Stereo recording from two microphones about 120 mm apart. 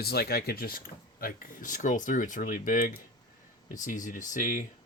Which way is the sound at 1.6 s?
90° left.